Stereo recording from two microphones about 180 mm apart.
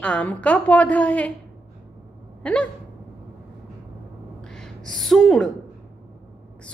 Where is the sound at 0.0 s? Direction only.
5° left (ahead or behind).